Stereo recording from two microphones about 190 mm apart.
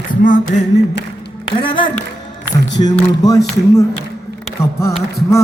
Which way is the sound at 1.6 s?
25° left (ahead or behind).